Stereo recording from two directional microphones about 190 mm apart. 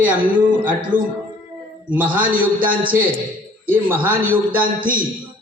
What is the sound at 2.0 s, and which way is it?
Speech, 45° right (ahead or behind).